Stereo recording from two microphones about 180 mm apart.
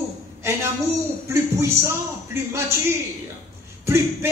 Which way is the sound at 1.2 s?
15° right (ahead or behind).